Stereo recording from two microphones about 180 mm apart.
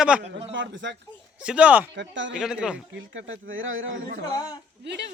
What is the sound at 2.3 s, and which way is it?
Speech, 5° right (ahead or behind).